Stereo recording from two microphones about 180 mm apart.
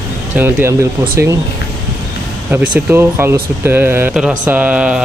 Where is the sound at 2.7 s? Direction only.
10° right (ahead or behind).